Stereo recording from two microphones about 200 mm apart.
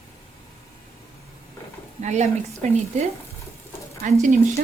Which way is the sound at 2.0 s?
35° right (ahead or behind).